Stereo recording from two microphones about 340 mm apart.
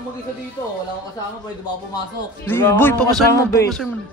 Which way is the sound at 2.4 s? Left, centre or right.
Centre.